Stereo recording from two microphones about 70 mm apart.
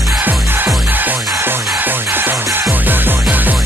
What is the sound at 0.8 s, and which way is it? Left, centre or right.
Music, right.